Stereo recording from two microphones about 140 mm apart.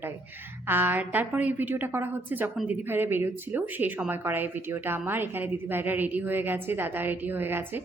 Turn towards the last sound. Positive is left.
turn(degrees=-15)  # may be behind; listen again after turning